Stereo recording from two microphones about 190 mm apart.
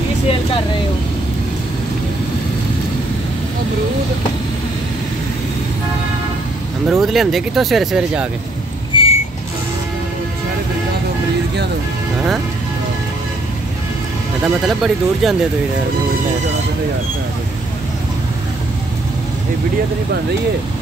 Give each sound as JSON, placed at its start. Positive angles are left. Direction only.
{"t": 6.9, "sound": "speech", "side_deg": 0}
{"t": 8.9, "sound": "vehicle", "side_deg": 30}
{"t": 14.4, "sound": "speech", "side_deg": 0}